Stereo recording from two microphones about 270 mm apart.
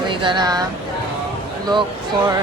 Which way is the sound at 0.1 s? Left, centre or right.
Centre.